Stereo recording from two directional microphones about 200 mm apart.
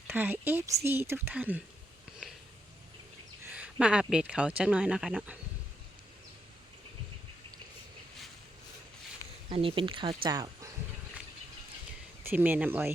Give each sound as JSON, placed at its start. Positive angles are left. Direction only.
{"t": 0.1, "sound": "speech", "side_deg": -10}
{"t": 3.4, "sound": "speech", "side_deg": -5}
{"t": 9.5, "sound": "speech", "side_deg": -25}
{"t": 12.2, "sound": "speech", "side_deg": -10}